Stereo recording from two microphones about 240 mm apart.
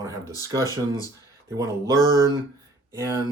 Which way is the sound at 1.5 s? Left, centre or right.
Centre.